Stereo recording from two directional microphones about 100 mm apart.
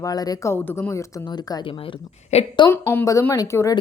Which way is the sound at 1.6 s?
60° left (ahead or behind).